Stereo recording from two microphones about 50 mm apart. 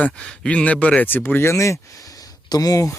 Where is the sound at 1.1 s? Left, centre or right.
Left.